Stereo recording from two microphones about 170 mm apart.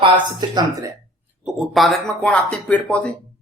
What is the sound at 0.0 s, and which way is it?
Speech, 25° right (ahead or behind).